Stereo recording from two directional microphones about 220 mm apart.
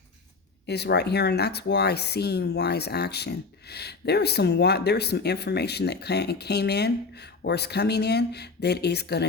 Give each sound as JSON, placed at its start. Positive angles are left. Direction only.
{"t": 0.7, "sound": "speech", "side_deg": 50}